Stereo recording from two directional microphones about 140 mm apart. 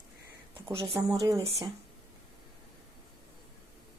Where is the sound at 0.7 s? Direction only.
40° right (ahead or behind).